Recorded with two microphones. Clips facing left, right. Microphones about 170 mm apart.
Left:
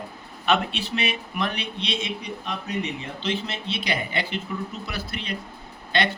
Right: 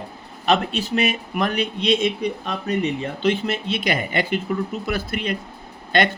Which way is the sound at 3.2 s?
50° right (ahead or behind).